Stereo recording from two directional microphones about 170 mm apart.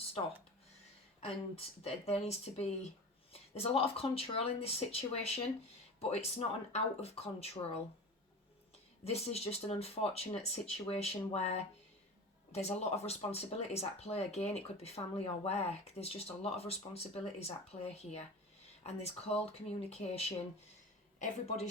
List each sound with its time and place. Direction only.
1.2 s speech: 35° left (ahead or behind)
9.0 s speech: 35° left (ahead or behind)
12.5 s speech: 40° left (ahead or behind)
19.3 s speech: 40° left (ahead or behind)